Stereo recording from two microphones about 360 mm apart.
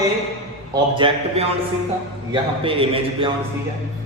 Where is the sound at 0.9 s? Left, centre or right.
Centre.